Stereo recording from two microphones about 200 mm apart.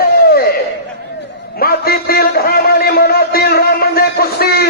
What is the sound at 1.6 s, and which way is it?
A man's voice, 50° left (ahead or behind).